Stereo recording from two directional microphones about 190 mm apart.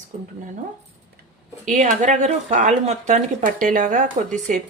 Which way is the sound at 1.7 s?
40° right (ahead or behind).